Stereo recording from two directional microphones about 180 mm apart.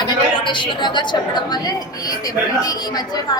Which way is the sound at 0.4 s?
25° left (ahead or behind).